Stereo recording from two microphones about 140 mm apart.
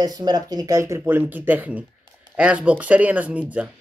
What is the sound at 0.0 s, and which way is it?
Speech, 25° right (ahead or behind).